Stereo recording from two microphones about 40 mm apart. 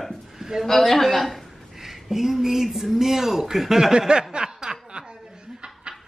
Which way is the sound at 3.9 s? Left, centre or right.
Right.